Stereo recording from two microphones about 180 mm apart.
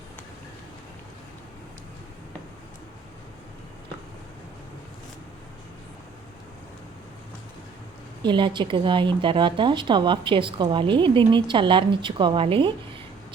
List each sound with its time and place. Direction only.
8.2 s a woman's voice: 25° right (ahead or behind)